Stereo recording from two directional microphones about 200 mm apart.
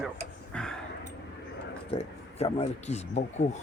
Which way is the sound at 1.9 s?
30° left (ahead or behind).